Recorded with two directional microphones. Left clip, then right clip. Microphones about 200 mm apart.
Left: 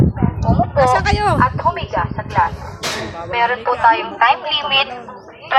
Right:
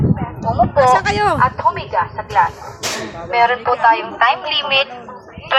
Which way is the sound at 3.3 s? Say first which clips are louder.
Right 3 dB; 60° right (ahead or behind).